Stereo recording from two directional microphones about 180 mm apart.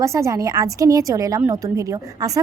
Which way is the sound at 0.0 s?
15° right (ahead or behind).